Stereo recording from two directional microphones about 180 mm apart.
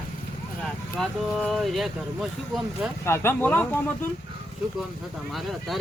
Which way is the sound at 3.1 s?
10° left (ahead or behind).